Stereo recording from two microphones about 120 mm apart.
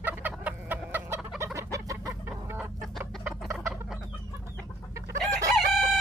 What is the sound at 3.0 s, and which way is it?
Chicken, 15° right (ahead or behind).